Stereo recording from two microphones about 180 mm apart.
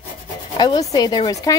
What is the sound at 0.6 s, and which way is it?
Rub, 20° left (ahead or behind).